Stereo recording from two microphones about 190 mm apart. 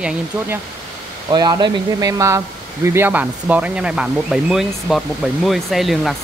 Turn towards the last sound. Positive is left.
turn(degrees=0)  # may be behind; listen again after turning